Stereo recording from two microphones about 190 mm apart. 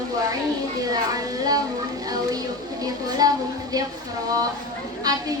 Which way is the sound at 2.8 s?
20° right (ahead or behind).